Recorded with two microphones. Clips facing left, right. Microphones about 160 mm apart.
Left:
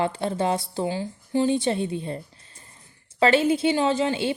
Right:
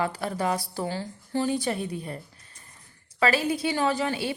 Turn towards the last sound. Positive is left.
turn(degrees=25)  # may be behind; listen again after turning